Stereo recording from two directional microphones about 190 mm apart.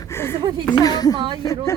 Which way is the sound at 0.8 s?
20° left (ahead or behind).